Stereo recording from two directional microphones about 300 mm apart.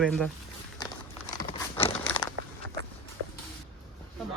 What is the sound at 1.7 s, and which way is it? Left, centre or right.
Crumpling, centre.